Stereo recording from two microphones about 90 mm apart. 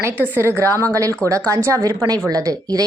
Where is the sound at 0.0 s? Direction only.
30° right (ahead or behind).